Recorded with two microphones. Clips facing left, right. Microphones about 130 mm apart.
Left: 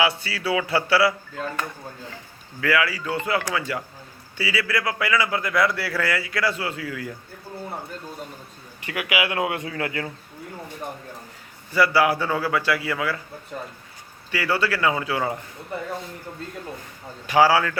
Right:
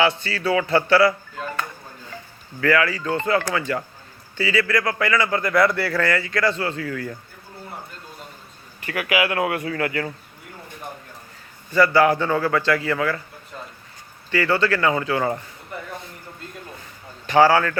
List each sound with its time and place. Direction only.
0.0 s speech: 10° left (ahead or behind)
2.6 s speech: 10° left (ahead or behind)
8.8 s a man's voice: 15° left (ahead or behind)
11.7 s speech: 10° left (ahead or behind)
14.3 s speech: 10° left (ahead or behind)
17.2 s speech: 10° left (ahead or behind)